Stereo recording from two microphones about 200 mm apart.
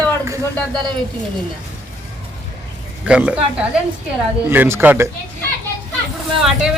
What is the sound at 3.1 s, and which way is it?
Speech, 5° right (ahead or behind).